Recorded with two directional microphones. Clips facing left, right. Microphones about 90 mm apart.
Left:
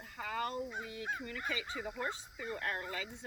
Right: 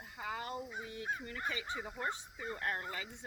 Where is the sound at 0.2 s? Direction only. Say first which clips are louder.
Left 3 dB; 15° right (ahead or behind).